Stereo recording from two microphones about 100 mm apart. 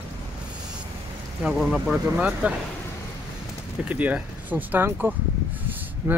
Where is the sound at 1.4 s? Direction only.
5° right (ahead or behind).